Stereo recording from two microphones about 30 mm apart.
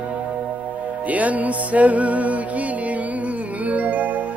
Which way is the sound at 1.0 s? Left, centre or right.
Right.